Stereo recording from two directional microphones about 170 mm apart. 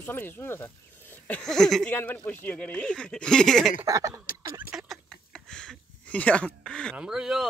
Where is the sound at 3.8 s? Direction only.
20° right (ahead or behind).